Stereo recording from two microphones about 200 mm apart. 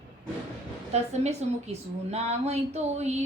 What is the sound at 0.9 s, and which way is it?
A woman's voice, 35° right (ahead or behind).